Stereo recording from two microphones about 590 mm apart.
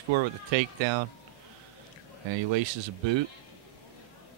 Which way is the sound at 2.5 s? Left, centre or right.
Right.